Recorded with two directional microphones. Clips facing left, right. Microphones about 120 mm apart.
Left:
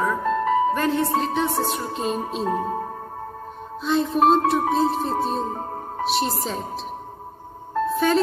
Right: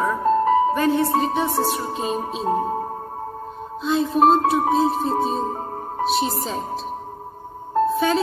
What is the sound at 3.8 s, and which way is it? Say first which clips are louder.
Music: right 1 dB; centre (ahead or behind).